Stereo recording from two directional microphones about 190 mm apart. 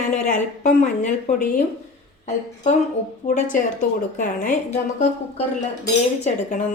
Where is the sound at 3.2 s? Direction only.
40° left (ahead or behind).